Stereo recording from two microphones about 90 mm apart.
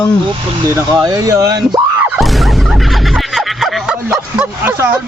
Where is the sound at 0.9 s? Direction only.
45° right (ahead or behind).